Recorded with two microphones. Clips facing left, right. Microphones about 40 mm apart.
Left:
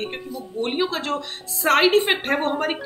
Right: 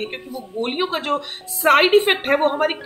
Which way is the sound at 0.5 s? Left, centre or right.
Right.